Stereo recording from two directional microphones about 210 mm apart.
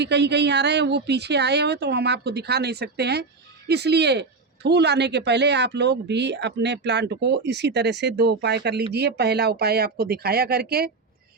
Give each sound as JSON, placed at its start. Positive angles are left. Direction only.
{"t": 0.0, "sound": "speech", "side_deg": -55}